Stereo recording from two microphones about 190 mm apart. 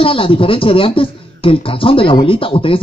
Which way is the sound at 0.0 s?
30° left (ahead or behind).